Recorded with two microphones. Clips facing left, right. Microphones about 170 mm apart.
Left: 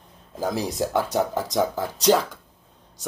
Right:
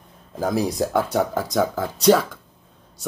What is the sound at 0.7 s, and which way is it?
Speech, 15° left (ahead or behind).